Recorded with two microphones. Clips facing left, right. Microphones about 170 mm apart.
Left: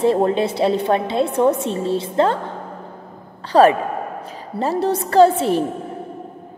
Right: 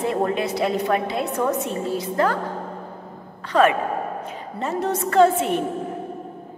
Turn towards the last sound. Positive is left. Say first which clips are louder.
# left 4 dB
turn(degrees=35)  # may be behind; listen again after turning